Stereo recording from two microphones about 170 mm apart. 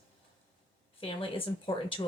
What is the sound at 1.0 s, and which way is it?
Speech, 30° left (ahead or behind).